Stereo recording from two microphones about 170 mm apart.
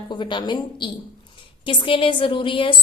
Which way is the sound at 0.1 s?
25° left (ahead or behind).